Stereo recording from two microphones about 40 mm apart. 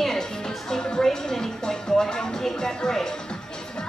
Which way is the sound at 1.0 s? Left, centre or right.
Centre.